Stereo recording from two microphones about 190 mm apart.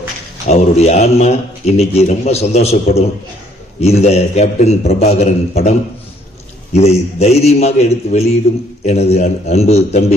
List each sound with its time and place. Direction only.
0.4 s a man's voice: 35° left (ahead or behind)
6.7 s a man's voice: 35° left (ahead or behind)